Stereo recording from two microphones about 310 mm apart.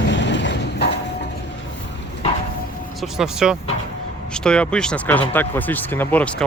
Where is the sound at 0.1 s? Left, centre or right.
Left.